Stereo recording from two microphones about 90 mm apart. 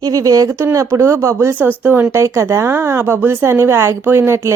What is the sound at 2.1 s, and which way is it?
A woman's voice, 30° right (ahead or behind).